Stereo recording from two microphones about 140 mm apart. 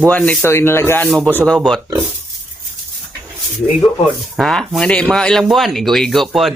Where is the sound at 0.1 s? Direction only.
10° left (ahead or behind).